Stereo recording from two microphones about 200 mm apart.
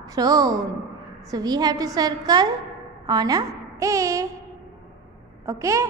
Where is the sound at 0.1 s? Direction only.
20° right (ahead or behind).